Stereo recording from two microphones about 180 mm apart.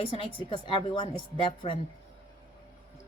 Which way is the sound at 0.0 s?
30° left (ahead or behind).